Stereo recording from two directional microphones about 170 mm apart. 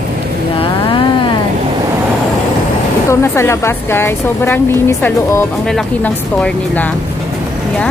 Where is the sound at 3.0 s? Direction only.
15° left (ahead or behind).